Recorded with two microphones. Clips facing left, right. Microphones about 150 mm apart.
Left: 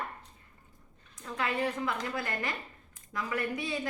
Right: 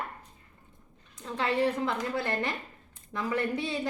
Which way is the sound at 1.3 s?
30° right (ahead or behind).